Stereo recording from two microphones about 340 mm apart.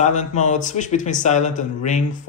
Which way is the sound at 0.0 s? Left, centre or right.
Left.